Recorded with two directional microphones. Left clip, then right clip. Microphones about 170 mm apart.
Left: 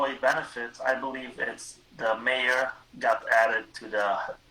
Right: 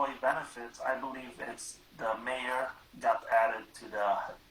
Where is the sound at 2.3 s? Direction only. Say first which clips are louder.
Left 8 dB; 35° left (ahead or behind).